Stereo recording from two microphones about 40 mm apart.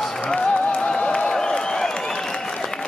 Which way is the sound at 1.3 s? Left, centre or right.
Centre.